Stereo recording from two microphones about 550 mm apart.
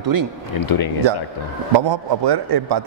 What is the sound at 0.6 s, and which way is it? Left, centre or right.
Speech, left.